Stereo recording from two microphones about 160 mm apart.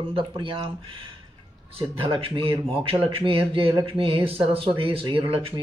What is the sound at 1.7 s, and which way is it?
Speech, 35° right (ahead or behind).